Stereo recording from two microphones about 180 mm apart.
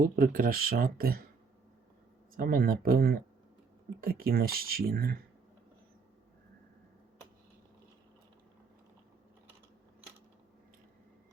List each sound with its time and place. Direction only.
0.0 s speech: 55° right (ahead or behind)
2.3 s speech: 50° right (ahead or behind)